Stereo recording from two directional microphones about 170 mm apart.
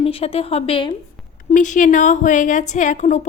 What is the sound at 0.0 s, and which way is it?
Speech, 35° left (ahead or behind).